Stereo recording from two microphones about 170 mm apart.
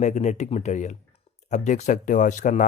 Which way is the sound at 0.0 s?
45° left (ahead or behind).